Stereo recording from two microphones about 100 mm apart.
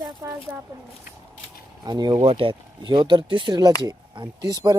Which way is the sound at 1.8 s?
45° right (ahead or behind).